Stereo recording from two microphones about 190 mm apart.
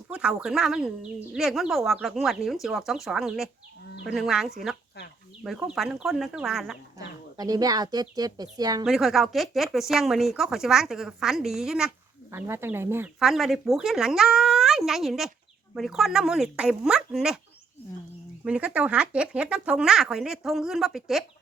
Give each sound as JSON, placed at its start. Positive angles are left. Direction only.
{"t": 0.1, "sound": "speech", "side_deg": -5}
{"t": 7.3, "sound": "speech", "side_deg": -20}
{"t": 8.8, "sound": "speech", "side_deg": 0}
{"t": 13.1, "sound": "speech", "side_deg": 0}
{"t": 18.4, "sound": "speech", "side_deg": -5}